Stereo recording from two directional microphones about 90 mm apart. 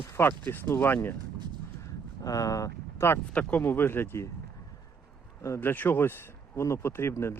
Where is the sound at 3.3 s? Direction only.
15° left (ahead or behind).